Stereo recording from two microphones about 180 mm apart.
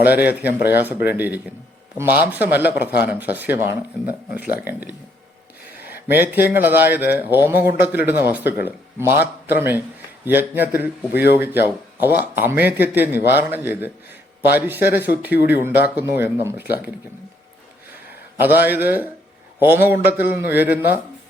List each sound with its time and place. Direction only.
0.0 s a man's voice: 10° right (ahead or behind)
6.1 s a man's voice: 10° right (ahead or behind)
11.1 s speech: 65° left (ahead or behind)
11.6 s a man's voice: 10° right (ahead or behind)
18.3 s a man's voice: 10° right (ahead or behind)